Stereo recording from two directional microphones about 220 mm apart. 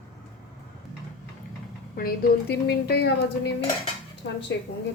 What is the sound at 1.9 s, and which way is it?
A woman's voice, 45° left (ahead or behind).